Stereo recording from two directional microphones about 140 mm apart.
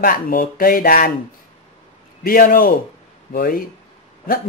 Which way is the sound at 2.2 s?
90° left.